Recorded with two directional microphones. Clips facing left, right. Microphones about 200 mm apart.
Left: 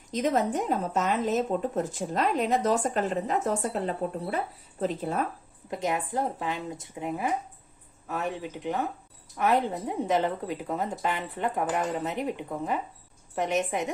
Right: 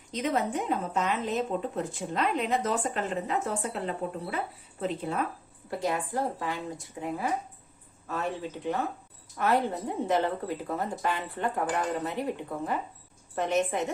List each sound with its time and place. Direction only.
0.1 s a woman's voice: 40° left (ahead or behind)
5.7 s a woman's voice: 20° left (ahead or behind)